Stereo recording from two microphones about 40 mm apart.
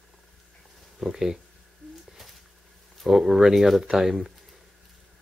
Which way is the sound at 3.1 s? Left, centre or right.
Centre.